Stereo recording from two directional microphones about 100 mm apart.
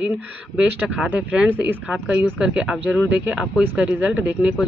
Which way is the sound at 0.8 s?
10° right (ahead or behind).